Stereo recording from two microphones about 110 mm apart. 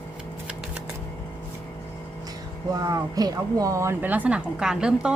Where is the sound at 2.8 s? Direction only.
35° right (ahead or behind).